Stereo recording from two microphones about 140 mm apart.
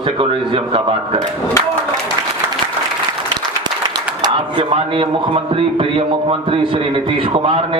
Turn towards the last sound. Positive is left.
turn(degrees=-40)  # may be behind; listen again after turning